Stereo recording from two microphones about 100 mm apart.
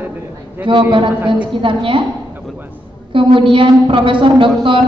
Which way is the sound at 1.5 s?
60° right (ahead or behind).